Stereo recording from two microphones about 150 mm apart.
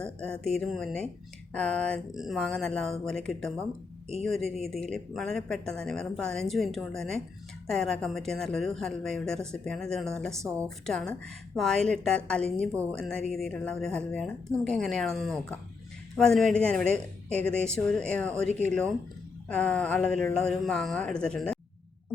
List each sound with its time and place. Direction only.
0.0 s a woman's voice: 5° left (ahead or behind)